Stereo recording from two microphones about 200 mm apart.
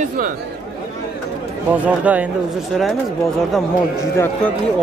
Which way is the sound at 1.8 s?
5° right (ahead or behind).